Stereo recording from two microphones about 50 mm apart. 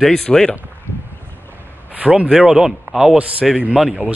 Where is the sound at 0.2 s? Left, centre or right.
Centre.